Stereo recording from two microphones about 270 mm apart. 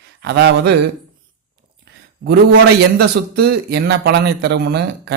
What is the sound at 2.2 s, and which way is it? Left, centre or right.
Speech, right.